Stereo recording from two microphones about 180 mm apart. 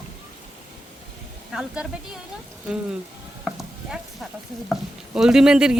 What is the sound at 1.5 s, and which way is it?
Speech, 5° right (ahead or behind).